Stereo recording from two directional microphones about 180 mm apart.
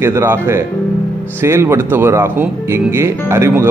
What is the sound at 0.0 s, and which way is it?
Speech, 15° right (ahead or behind).